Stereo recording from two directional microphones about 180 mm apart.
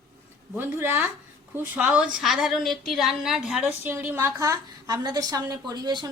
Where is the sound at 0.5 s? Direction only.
10° right (ahead or behind).